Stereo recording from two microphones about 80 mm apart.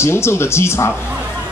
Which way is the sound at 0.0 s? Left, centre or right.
Left.